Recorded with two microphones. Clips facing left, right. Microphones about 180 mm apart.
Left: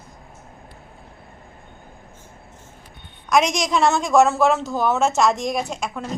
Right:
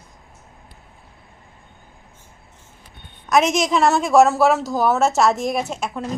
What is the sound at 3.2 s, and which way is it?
A woman's voice, 5° right (ahead or behind).